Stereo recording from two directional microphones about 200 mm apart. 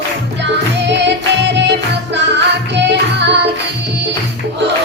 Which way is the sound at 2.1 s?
60° right (ahead or behind).